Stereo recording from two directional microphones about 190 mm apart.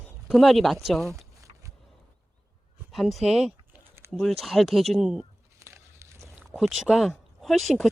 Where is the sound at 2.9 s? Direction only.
Centre (ahead or behind).